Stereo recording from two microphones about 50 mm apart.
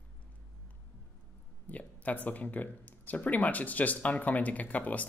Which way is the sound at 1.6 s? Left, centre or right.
Left.